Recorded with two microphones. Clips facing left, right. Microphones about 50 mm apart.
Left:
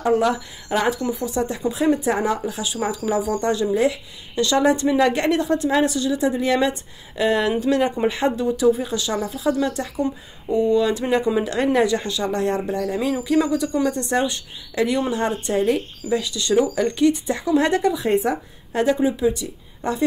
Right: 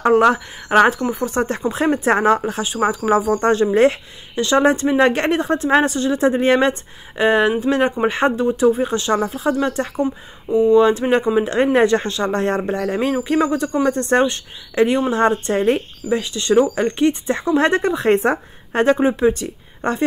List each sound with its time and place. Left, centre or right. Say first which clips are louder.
0.0 s speech: right 5 dB; right
4.4 s a woman's voice: right 3 dB; right
10.0 s speech: right 2 dB; centre
10.8 s a woman's voice: right 5 dB; right
18.0 s speech: right 4 dB; right